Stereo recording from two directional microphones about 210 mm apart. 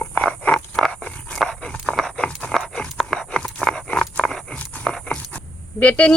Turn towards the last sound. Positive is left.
turn(degrees=5)  # may be behind; listen again after turning